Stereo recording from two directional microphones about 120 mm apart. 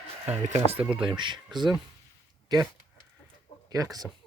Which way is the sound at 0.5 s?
60° right (ahead or behind).